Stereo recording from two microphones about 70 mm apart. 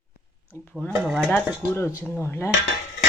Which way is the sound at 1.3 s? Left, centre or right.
Left.